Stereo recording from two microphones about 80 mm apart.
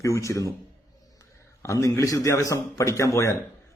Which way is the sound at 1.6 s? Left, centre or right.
Left.